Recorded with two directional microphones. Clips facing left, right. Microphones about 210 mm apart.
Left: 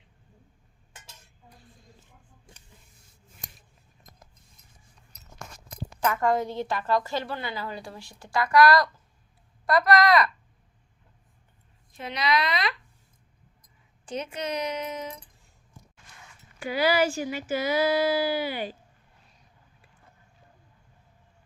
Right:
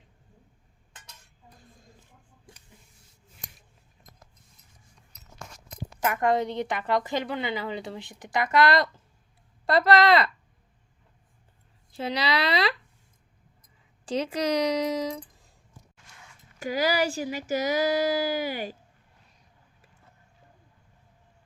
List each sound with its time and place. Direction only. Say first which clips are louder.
6.1 s a woman's voice: right 2 dB; 20° right (ahead or behind)
11.9 s a woman's voice: even; 30° right (ahead or behind)
14.0 s speech: right 5 dB; 30° right (ahead or behind)
16.6 s speech: left 2 dB; 40° right (ahead or behind)